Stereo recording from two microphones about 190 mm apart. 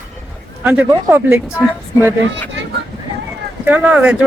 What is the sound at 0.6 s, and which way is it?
Speech, 10° right (ahead or behind).